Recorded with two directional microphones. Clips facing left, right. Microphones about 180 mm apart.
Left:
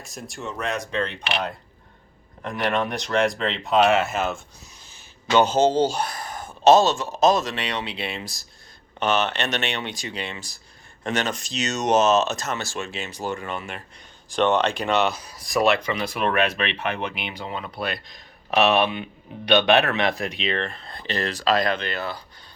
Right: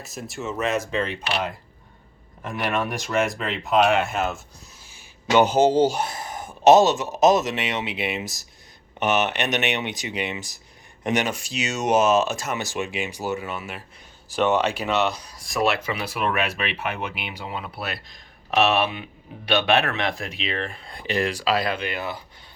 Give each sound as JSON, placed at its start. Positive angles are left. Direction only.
{"t": 0.0, "sound": "speech", "side_deg": 0}
{"t": 4.9, "sound": "a sound", "side_deg": -10}
{"t": 5.8, "sound": "speech", "side_deg": -20}